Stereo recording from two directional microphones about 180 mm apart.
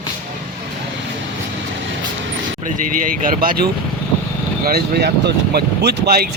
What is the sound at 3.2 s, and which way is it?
Speech, 50° right (ahead or behind).